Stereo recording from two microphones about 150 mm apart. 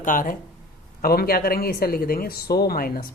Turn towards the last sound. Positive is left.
turn(degrees=80)